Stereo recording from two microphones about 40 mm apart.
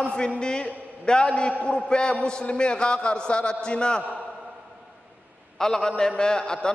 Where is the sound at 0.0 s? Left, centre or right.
Left.